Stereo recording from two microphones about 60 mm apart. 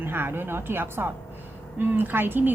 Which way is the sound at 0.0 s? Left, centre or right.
Right.